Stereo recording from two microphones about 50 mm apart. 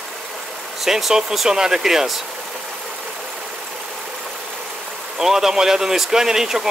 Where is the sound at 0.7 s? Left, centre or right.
Centre.